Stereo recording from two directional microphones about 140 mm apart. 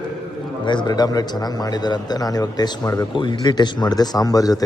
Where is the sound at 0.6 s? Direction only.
30° left (ahead or behind).